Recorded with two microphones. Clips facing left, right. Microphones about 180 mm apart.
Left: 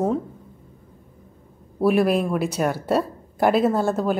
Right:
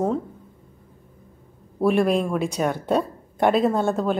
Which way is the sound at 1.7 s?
5° left (ahead or behind).